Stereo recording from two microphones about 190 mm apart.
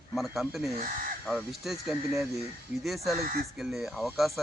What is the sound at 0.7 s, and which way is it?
Speech, 45° right (ahead or behind).